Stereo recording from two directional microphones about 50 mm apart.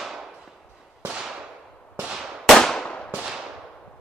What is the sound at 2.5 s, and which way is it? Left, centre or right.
Firecracker, centre.